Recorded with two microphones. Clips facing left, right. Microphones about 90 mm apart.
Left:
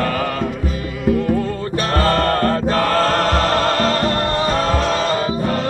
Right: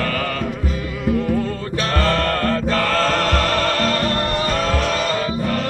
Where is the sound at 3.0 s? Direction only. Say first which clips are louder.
Left 2 dB; 25° left (ahead or behind).